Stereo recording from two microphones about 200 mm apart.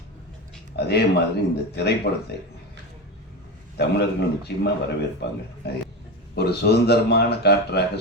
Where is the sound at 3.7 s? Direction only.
55° left (ahead or behind).